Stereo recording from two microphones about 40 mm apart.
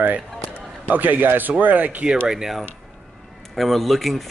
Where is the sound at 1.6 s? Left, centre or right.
Right.